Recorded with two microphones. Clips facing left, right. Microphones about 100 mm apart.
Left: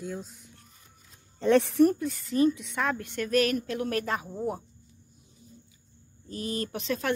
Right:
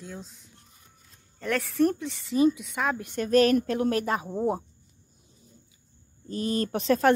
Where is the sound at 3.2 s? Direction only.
35° right (ahead or behind).